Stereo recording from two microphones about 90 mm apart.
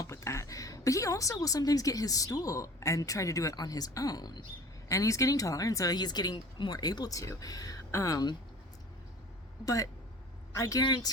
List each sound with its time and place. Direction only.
0.0 s a woman's voice: 35° left (ahead or behind)
4.9 s speech: 35° left (ahead or behind)
9.6 s speech: 40° left (ahead or behind)
10.8 s speech: 50° left (ahead or behind)